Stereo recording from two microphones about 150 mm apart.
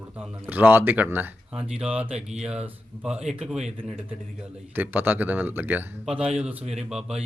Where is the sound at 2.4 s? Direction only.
5° right (ahead or behind).